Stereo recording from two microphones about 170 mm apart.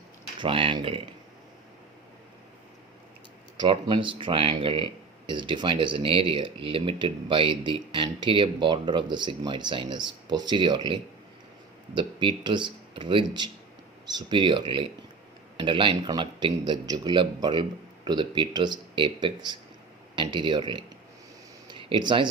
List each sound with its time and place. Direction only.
0.3 s speech: 30° right (ahead or behind)
3.6 s speech: 30° right (ahead or behind)
21.7 s a sound: 30° right (ahead or behind)